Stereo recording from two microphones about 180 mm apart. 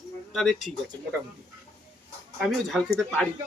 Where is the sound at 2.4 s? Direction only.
Centre (ahead or behind).